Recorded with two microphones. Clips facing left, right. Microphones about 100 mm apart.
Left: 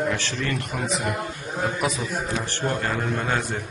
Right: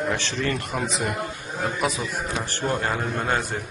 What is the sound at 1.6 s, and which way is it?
A man's voice, centre (ahead or behind).